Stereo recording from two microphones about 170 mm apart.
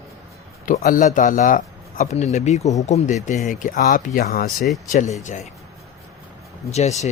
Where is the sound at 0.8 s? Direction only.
50° left (ahead or behind).